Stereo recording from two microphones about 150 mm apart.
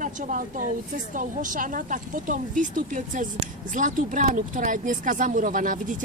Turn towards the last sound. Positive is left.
turn(degrees=-65)  # may be behind; listen again after turning